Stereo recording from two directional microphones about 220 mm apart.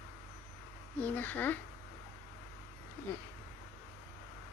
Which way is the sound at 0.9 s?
5° left (ahead or behind).